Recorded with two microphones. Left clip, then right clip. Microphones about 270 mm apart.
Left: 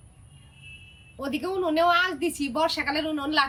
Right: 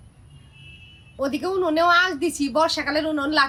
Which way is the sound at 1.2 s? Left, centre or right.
Centre.